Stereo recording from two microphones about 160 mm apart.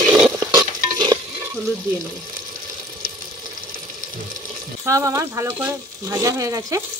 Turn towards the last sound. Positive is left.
turn(degrees=-20)  # may be behind; listen again after turning